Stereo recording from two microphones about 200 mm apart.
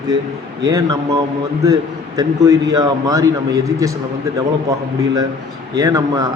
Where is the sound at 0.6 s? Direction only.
20° right (ahead or behind).